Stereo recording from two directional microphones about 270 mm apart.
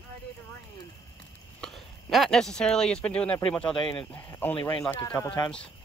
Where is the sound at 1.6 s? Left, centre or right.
Centre.